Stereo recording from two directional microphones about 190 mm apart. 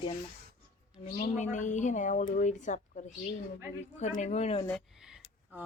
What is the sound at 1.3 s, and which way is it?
A woman's voice, 40° left (ahead or behind).